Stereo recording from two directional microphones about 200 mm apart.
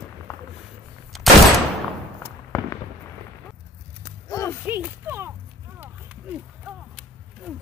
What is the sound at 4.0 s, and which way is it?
Walk, 15° left (ahead or behind).